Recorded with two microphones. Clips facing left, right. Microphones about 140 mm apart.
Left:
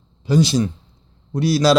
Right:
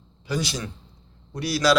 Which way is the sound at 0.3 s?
25° left (ahead or behind).